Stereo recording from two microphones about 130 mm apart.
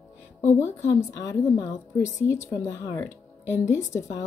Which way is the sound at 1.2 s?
30° left (ahead or behind).